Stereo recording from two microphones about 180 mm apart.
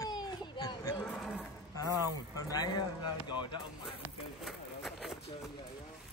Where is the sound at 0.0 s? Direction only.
25° left (ahead or behind).